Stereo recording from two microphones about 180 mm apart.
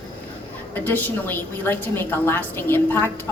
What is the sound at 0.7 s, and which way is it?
A woman's voice, 10° left (ahead or behind).